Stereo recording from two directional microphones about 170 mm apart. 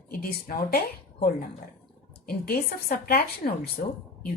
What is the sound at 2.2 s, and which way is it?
A woman's voice, 65° left (ahead or behind).